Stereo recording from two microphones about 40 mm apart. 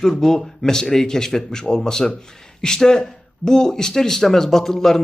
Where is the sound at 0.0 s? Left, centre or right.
Centre.